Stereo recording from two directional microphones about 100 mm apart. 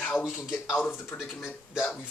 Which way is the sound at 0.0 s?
15° left (ahead or behind).